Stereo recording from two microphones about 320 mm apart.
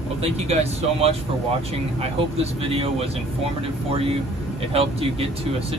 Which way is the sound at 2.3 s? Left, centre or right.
Centre.